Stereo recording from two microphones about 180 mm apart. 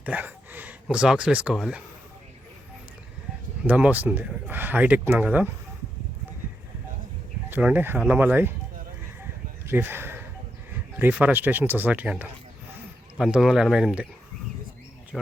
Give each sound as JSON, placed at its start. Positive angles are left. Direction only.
{"t": 0.0, "sound": "speech", "side_deg": -10}
{"t": 3.7, "sound": "speech", "side_deg": -10}
{"t": 7.5, "sound": "speech", "side_deg": -10}
{"t": 9.6, "sound": "speech", "side_deg": -10}
{"t": 15.1, "sound": "speech", "side_deg": 0}